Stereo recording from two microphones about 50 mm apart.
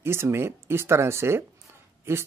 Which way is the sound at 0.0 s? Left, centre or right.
Right.